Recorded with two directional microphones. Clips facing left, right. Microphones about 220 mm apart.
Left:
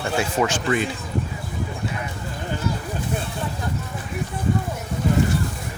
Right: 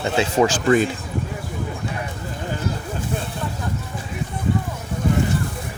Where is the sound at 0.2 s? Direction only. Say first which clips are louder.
Right 5 dB; 30° right (ahead or behind).